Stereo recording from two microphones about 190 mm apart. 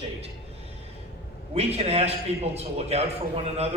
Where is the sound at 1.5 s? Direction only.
35° right (ahead or behind).